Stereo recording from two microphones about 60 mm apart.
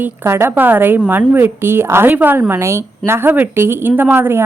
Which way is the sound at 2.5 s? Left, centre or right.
Right.